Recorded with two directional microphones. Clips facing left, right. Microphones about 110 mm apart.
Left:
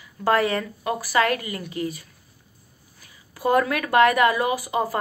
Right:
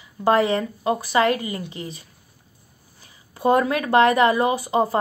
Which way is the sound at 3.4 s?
25° right (ahead or behind).